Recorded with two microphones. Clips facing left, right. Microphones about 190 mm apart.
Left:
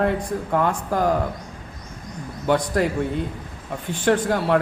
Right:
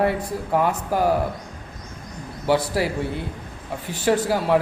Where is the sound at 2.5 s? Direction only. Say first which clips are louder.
Left 1 dB; 5° right (ahead or behind).